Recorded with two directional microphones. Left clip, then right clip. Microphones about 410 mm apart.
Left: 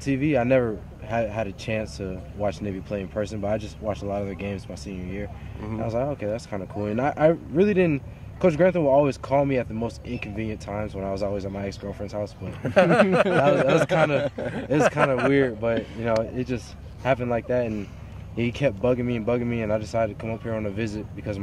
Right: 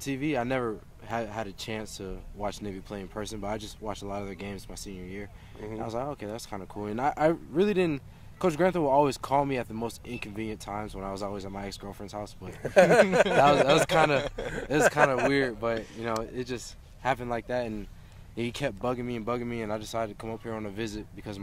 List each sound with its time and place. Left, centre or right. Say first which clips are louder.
0.0 s speech: left 7 dB; centre
13.5 s speech: left 2 dB; centre
14.2 s speech: left 6 dB; centre
14.8 s speech: left 1 dB; right
15.3 s speech: left 5 dB; centre